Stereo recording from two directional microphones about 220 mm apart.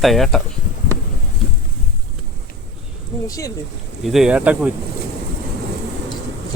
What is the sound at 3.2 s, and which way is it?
Speech, 15° left (ahead or behind).